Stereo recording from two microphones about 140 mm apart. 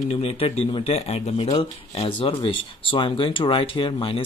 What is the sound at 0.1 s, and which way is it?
Speech, 45° left (ahead or behind).